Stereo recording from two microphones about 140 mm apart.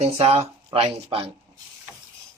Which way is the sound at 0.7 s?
40° right (ahead or behind).